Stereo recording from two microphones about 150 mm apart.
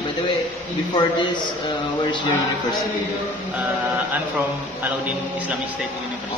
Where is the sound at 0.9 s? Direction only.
30° left (ahead or behind).